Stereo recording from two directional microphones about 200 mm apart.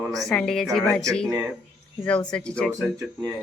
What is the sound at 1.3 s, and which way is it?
Speech, 10° right (ahead or behind).